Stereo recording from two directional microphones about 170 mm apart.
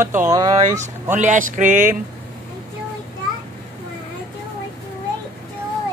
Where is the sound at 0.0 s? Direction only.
15° right (ahead or behind).